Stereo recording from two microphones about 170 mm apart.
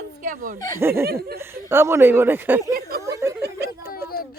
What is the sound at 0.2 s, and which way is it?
Snicker, 50° right (ahead or behind).